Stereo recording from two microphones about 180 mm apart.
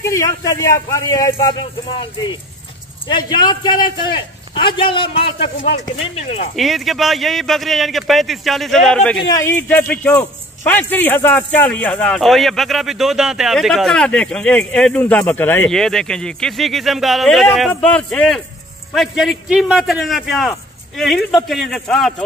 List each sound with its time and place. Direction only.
0.0 s a man's voice: 15° left (ahead or behind)
3.1 s a man's voice: 25° left (ahead or behind)
6.5 s speech: centre (ahead or behind)
9.3 s speech: 15° left (ahead or behind)